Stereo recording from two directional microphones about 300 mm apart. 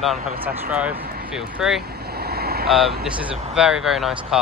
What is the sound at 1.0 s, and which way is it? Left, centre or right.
Speech, right.